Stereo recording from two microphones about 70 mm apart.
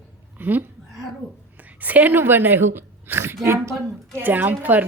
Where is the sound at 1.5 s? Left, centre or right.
Right.